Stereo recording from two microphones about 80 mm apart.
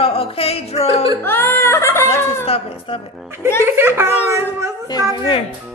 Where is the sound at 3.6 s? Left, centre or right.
Right.